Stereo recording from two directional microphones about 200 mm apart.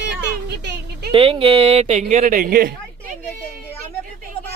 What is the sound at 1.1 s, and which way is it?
Speech, 25° right (ahead or behind).